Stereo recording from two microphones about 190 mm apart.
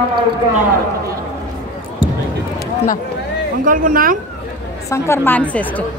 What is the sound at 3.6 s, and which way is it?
Speech, 45° right (ahead or behind).